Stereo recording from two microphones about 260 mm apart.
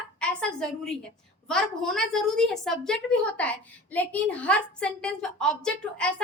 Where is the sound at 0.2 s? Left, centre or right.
Centre.